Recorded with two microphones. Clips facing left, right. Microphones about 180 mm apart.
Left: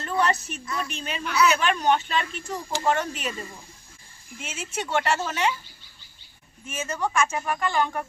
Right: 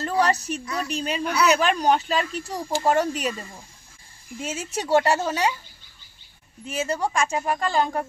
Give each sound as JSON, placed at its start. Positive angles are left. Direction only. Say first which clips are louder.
{"t": 0.0, "sound": "a woman's voice", "louder": "right 3 dB", "side_deg": -35}
{"t": 4.4, "sound": "a woman's voice", "louder": "right 4 dB", "side_deg": -35}
{"t": 6.7, "sound": "a woman's voice", "louder": "right 3 dB", "side_deg": -35}